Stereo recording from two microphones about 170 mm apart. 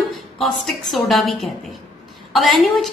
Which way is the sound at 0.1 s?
Centre (ahead or behind).